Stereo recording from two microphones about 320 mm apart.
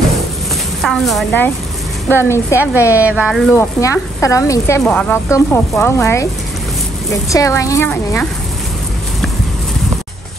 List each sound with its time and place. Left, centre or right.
0.8 s a woman's voice: centre
3.0 s speech: centre